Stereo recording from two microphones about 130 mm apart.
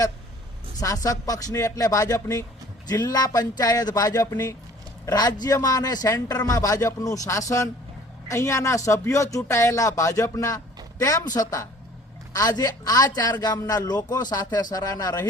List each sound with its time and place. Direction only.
0.8 s a man's voice: 25° left (ahead or behind)